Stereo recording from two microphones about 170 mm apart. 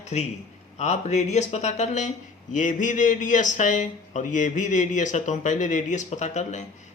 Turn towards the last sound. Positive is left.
turn(degrees=45)  # may be behind; listen again after turning